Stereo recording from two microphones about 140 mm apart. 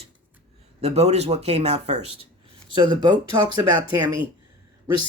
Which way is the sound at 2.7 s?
30° right (ahead or behind).